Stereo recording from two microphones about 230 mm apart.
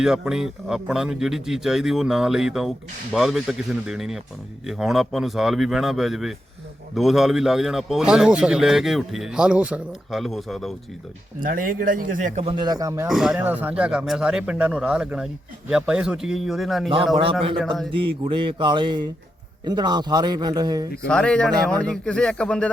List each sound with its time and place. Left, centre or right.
0.0 s a man's voice: centre
11.3 s speech: right; by 13.1 s centre
13.1 s a man's voice: centre
17.9 s a sound: right
19.6 s a man's voice: centre
21.1 s a man's voice: centre